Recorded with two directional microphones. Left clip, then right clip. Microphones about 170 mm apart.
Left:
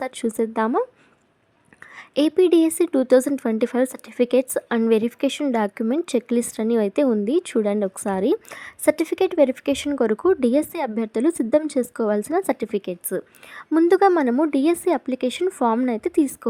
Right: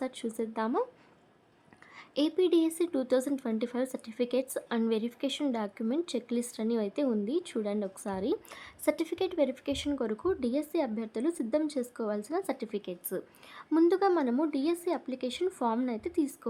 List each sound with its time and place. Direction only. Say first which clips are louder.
0.0 s speech: left 11 dB; 40° left (ahead or behind)
2.0 s speech: left 10 dB; 35° left (ahead or behind)
15.9 s speech: left 11 dB; 40° left (ahead or behind)